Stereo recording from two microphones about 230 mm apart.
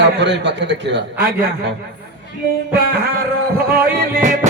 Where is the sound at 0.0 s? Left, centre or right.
Right.